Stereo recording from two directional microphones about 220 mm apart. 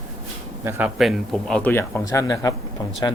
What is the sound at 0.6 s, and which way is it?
Speech, 10° right (ahead or behind).